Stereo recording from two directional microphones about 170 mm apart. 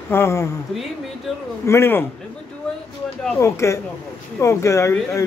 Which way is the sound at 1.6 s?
15° left (ahead or behind).